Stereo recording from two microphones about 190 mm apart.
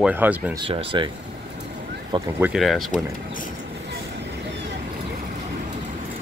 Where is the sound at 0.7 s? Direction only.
25° right (ahead or behind).